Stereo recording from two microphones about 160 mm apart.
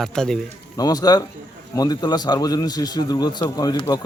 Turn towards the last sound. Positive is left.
turn(degrees=25)  # may be behind; listen again after turning